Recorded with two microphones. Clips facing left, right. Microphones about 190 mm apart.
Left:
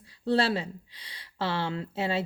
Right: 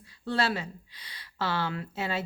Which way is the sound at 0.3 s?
30° left (ahead or behind).